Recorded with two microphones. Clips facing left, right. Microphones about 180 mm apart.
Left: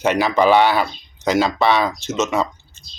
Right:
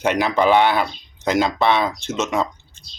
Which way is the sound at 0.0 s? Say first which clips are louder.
Left 2 dB; 15° right (ahead or behind).